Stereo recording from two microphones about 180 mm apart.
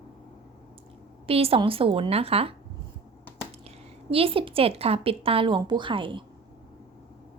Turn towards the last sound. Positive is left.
turn(degrees=-25)  # may be behind; listen again after turning